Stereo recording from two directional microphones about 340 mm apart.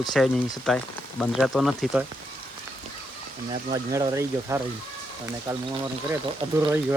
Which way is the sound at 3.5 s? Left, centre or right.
Centre.